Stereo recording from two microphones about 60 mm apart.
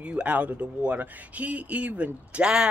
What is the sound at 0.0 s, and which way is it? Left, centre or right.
Speech, right.